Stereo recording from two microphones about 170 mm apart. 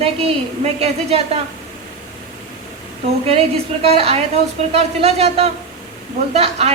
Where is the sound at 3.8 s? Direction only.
35° right (ahead or behind).